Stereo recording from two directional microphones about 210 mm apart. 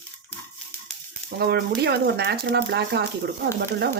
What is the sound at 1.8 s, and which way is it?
Speech, 50° right (ahead or behind).